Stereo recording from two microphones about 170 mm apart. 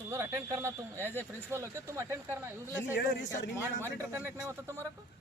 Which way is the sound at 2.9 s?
70° left (ahead or behind).